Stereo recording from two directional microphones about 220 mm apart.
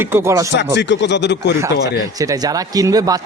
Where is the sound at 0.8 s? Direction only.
50° left (ahead or behind).